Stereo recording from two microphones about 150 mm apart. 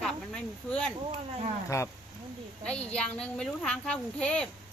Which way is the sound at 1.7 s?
20° left (ahead or behind).